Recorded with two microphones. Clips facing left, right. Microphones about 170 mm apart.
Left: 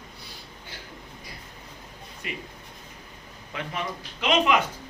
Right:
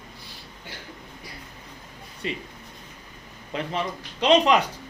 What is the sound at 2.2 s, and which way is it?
Speech, 30° right (ahead or behind).